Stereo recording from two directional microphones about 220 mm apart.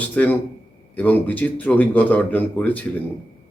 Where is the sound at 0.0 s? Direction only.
5° left (ahead or behind).